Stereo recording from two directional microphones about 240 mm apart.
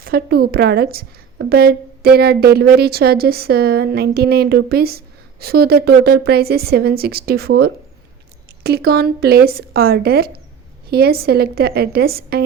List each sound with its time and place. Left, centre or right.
0.0 s a woman's voice: right